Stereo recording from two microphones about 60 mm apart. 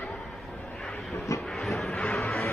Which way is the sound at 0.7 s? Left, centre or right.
Centre.